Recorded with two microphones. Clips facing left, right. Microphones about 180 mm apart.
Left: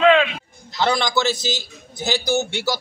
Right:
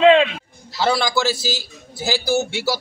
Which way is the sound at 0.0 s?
30° right (ahead or behind).